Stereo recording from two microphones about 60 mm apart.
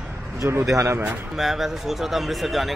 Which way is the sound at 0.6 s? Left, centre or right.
Right.